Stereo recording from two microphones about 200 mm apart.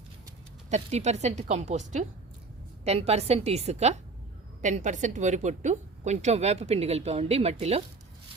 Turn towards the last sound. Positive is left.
turn(degrees=-30)  # may be behind; listen again after turning